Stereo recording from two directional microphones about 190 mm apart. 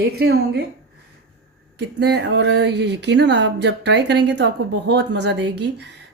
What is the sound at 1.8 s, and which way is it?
Speech, 65° right (ahead or behind).